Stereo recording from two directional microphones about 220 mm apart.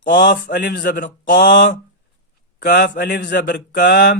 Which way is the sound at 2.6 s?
50° left (ahead or behind).